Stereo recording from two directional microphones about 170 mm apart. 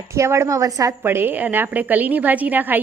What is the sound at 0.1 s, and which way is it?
A woman's voice, 15° right (ahead or behind).